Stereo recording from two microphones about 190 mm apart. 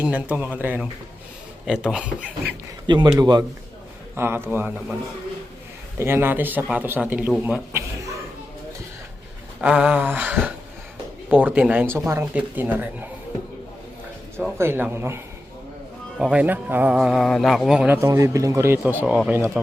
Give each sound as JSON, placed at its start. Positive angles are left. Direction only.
{"t": 0.0, "sound": "a man's voice", "side_deg": -5}
{"t": 2.8, "sound": "a man's voice", "side_deg": -25}
{"t": 6.0, "sound": "speech", "side_deg": -10}
{"t": 9.6, "sound": "speech", "side_deg": -5}
{"t": 14.6, "sound": "speech", "side_deg": -10}